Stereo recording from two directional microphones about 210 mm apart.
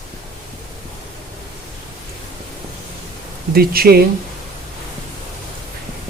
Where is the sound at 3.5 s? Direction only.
45° right (ahead or behind).